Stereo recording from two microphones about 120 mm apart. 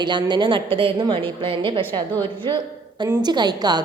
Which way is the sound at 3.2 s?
35° right (ahead or behind).